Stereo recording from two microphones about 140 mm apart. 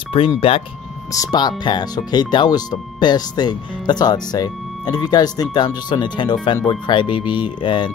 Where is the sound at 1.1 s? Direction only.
25° left (ahead or behind).